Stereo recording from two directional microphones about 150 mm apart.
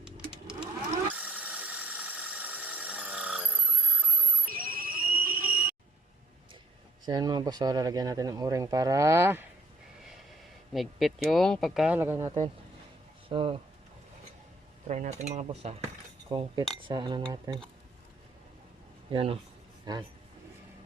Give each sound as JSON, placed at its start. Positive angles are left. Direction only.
{"t": 1.1, "sound": "a sound", "side_deg": -10}
{"t": 4.5, "sound": "a sound", "side_deg": -75}
{"t": 7.0, "sound": "speech", "side_deg": -25}
{"t": 10.7, "sound": "speech", "side_deg": 0}
{"t": 11.9, "sound": "speech", "side_deg": -15}
{"t": 13.2, "sound": "speech", "side_deg": -35}
{"t": 14.8, "sound": "cutlery", "side_deg": -50}
{"t": 16.3, "sound": "speech", "side_deg": -35}
{"t": 19.1, "sound": "speech", "side_deg": -40}
{"t": 19.8, "sound": "a man's voice", "side_deg": -25}